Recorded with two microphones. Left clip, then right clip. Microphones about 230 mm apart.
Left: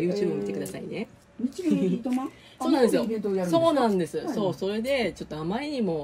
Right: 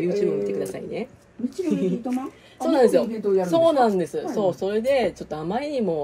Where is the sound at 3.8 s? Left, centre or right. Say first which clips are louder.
Right 4 dB; right.